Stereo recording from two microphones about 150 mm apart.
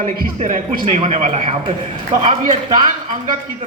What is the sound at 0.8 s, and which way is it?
A man's voice, 45° right (ahead or behind).